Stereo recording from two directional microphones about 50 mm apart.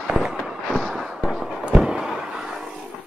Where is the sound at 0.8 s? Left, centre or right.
Centre.